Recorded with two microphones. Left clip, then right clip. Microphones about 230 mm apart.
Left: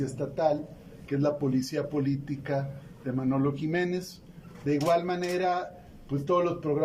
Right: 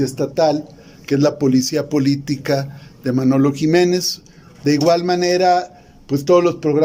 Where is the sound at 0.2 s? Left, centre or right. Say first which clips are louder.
Right 10 dB; right.